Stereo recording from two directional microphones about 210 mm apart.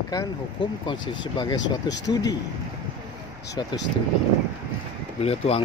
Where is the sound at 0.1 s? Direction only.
20° left (ahead or behind).